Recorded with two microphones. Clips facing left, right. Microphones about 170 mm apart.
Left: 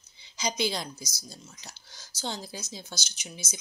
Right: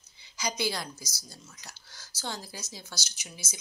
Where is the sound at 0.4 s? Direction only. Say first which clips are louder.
Left 2 dB; 20° left (ahead or behind).